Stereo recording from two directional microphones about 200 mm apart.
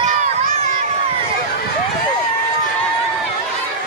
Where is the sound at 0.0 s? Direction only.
40° right (ahead or behind).